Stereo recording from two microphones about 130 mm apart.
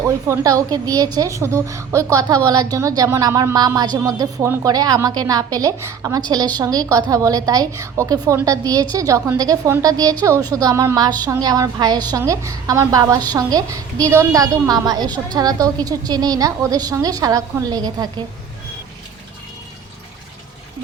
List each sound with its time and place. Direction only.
0.3 s a woman's voice: 25° right (ahead or behind)